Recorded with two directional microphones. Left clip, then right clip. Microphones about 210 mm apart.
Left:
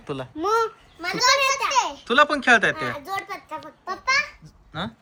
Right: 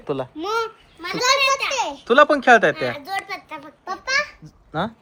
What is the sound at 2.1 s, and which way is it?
Speech, 5° left (ahead or behind).